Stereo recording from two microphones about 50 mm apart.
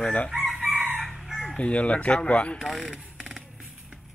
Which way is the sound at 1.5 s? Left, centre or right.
Left.